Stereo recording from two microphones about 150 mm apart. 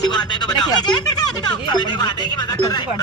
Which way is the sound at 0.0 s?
30° left (ahead or behind).